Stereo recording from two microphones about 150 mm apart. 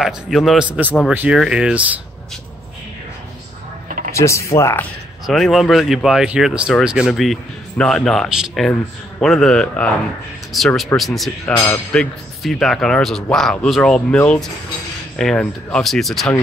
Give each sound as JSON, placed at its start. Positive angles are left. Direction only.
{"t": 0.0, "sound": "speech", "side_deg": 0}
{"t": 4.1, "sound": "speech", "side_deg": 20}
{"t": 5.2, "sound": "speech", "side_deg": 0}